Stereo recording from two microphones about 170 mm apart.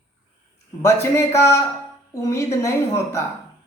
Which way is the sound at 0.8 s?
15° left (ahead or behind).